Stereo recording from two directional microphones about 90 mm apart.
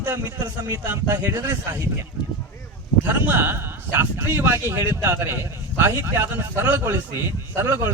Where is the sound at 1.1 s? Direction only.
45° right (ahead or behind).